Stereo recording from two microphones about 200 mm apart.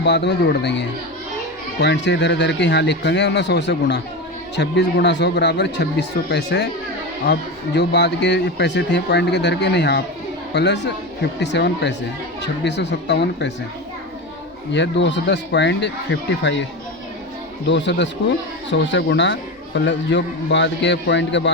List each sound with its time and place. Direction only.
0.0 s a man's voice: 60° left (ahead or behind)
7.8 s a man's voice: 60° left (ahead or behind)
14.7 s a man's voice: 60° left (ahead or behind)
17.7 s a man's voice: 60° left (ahead or behind)